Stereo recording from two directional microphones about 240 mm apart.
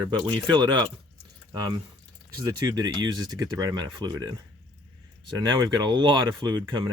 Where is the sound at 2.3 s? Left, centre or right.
Centre.